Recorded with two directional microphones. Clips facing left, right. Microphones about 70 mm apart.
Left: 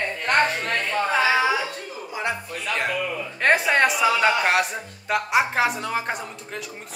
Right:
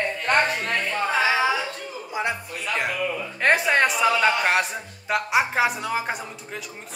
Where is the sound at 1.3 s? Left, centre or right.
Centre.